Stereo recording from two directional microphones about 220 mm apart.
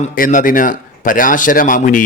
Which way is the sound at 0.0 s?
35° left (ahead or behind).